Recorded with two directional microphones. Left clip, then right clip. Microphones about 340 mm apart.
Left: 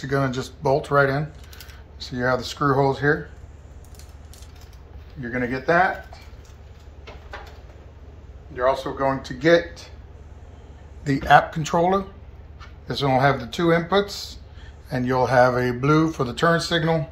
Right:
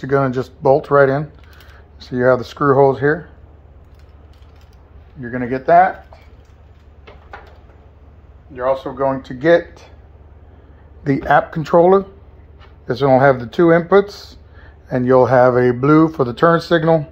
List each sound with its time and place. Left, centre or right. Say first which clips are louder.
0.0 s speech: right 7 dB; centre
5.3 s speech: right 8 dB; right
8.5 s speech: right 3 dB; right
11.1 s speech: right 2 dB; centre